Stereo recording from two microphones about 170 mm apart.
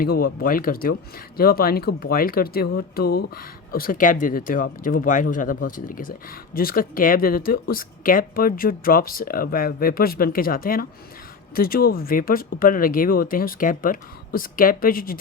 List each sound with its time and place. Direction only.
0.0 s speech: 60° left (ahead or behind)